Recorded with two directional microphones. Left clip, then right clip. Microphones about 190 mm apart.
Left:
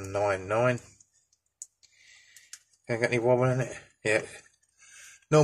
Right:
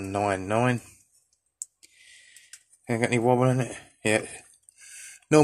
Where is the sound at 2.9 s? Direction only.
45° right (ahead or behind).